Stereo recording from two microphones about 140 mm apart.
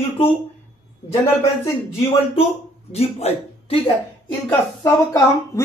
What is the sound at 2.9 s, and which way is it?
Speech, 45° left (ahead or behind).